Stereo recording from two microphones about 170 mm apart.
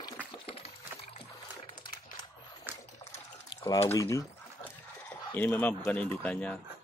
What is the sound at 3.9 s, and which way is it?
Speech, 20° left (ahead or behind).